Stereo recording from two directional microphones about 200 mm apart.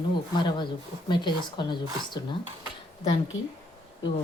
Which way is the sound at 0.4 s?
20° left (ahead or behind).